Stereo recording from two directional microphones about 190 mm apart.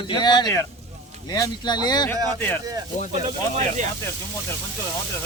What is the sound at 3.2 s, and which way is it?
Speech, 35° right (ahead or behind).